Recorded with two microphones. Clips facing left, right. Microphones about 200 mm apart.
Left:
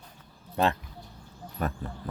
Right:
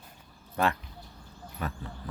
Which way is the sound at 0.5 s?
25° left (ahead or behind).